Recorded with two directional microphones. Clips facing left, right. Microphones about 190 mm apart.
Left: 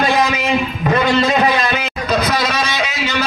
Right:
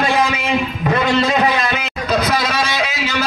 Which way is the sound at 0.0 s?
40° left (ahead or behind).